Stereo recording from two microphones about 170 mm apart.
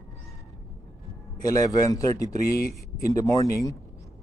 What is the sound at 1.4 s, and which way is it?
Speech, 20° left (ahead or behind).